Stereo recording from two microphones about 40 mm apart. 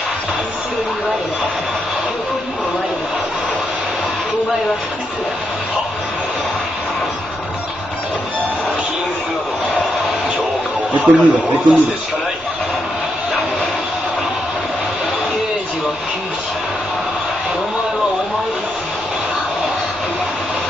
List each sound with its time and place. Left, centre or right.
11.0 s a man's voice: right